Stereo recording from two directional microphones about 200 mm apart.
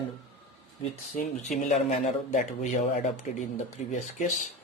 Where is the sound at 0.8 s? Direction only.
35° left (ahead or behind).